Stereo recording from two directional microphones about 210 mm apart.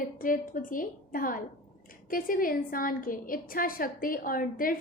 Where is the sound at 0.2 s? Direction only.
40° left (ahead or behind).